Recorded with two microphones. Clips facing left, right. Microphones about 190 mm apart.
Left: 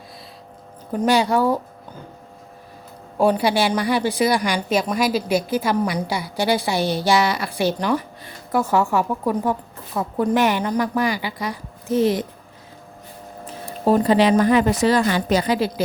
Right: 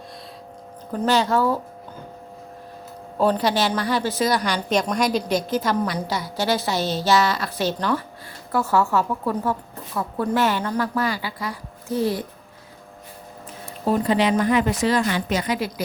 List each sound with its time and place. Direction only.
0.9 s a woman's voice: 10° left (ahead or behind)
3.2 s a woman's voice: 10° left (ahead or behind)
13.8 s a woman's voice: 40° left (ahead or behind)